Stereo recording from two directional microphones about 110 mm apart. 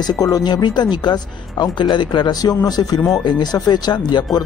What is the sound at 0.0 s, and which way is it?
Speech, 35° left (ahead or behind).